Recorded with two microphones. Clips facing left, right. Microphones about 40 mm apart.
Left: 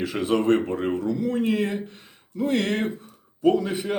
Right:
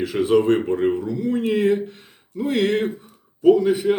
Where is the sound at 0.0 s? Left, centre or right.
Centre.